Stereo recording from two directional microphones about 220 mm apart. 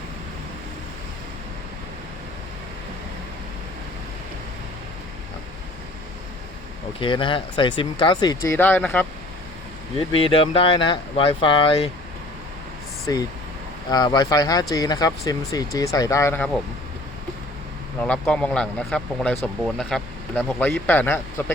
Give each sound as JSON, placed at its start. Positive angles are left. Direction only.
{"t": 7.0, "sound": "speech", "side_deg": 20}
{"t": 10.1, "sound": "speech", "side_deg": 25}
{"t": 13.1, "sound": "speech", "side_deg": 15}
{"t": 18.0, "sound": "speech", "side_deg": 5}